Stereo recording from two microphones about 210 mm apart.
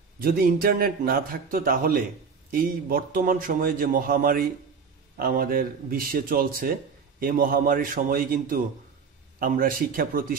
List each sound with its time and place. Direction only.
0.2 s a man's voice: 45° right (ahead or behind)